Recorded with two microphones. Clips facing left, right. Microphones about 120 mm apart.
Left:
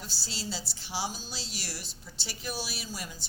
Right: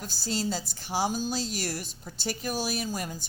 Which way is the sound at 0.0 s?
45° right (ahead or behind).